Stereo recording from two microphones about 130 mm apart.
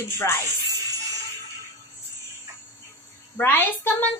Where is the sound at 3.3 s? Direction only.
15° left (ahead or behind).